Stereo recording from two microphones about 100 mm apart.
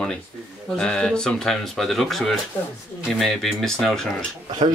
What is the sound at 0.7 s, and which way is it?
Speech, 10° left (ahead or behind).